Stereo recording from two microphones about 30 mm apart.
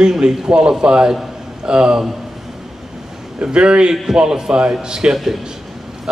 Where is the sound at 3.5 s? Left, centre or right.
Right.